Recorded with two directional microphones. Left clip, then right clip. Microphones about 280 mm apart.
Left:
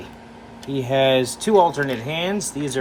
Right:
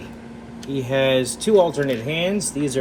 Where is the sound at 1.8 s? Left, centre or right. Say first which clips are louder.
Right 1 dB; left.